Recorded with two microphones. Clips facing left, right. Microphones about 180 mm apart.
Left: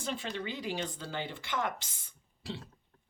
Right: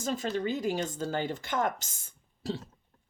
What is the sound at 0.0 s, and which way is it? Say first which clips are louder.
Speech: right 6 dB; 40° right (ahead or behind).